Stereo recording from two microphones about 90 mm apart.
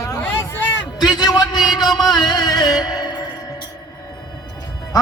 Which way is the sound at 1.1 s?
50° left (ahead or behind).